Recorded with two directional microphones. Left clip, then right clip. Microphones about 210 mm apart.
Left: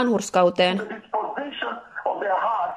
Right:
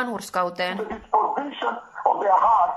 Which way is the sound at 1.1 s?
35° right (ahead or behind).